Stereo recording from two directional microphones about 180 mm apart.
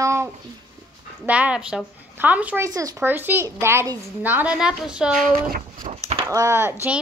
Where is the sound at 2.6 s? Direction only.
20° right (ahead or behind).